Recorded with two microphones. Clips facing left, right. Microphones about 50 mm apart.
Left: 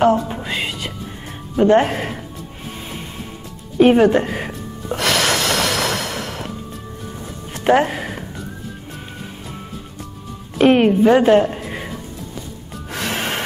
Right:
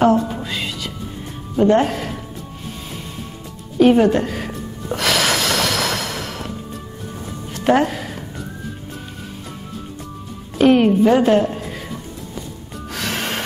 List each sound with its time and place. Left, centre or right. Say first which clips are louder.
0.3 s music: left 1 dB; left
1.6 s speech: left 1 dB; left
3.8 s speech: left 1 dB; left
4.5 s music: even; centre
7.5 s music: left 1 dB; centre
10.6 s a sound: even; left
12.9 s gasp: left 1 dB; centre